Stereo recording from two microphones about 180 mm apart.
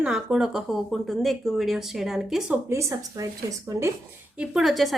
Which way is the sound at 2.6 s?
15° right (ahead or behind).